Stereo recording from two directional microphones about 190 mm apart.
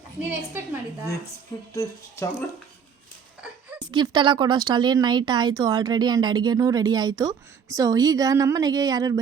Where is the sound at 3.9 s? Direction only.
20° right (ahead or behind).